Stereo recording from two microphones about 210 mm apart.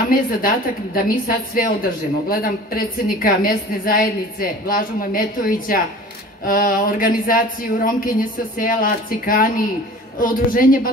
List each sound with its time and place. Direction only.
0.0 s a woman's voice: 45° left (ahead or behind)